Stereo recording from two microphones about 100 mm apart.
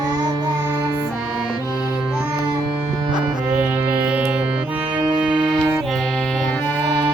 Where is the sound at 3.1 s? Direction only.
10° right (ahead or behind).